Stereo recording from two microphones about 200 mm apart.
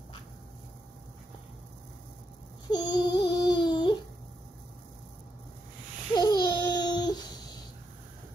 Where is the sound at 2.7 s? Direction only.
20° left (ahead or behind).